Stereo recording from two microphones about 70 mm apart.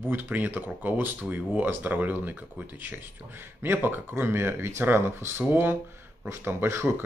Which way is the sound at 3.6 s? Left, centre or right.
Right.